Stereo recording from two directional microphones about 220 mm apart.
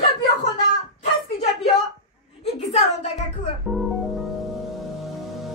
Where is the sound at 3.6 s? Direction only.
Centre (ahead or behind).